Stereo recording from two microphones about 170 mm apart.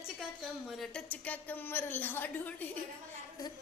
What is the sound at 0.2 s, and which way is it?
Speech, centre (ahead or behind).